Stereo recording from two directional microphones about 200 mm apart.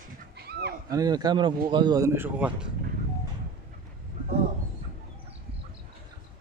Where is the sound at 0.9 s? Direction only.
20° right (ahead or behind).